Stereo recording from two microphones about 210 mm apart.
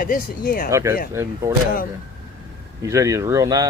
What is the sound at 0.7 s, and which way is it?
Speech, 15° right (ahead or behind).